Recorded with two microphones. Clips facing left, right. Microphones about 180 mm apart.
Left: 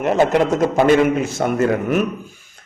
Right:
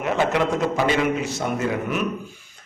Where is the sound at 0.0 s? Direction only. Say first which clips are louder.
Left 6 dB; 45° left (ahead or behind).